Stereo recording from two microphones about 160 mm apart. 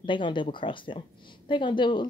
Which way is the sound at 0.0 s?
30° left (ahead or behind).